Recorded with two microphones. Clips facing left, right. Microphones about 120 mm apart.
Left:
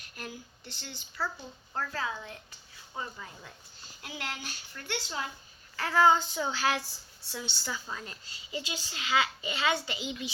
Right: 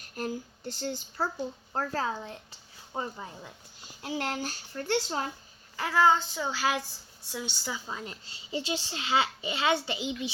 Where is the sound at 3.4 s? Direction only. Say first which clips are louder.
Right 3 dB; 15° right (ahead or behind).